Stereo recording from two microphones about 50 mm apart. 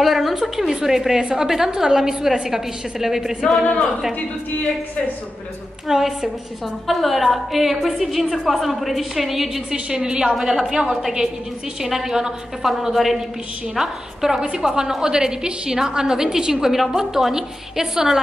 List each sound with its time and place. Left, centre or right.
0.0 s a woman's voice: centre
5.9 s a woman's voice: centre
9.8 s a woman's voice: centre
10.7 s a woman's voice: centre
11.0 s a woman's voice: centre